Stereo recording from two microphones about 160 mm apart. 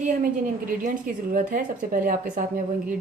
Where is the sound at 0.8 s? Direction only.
60° right (ahead or behind).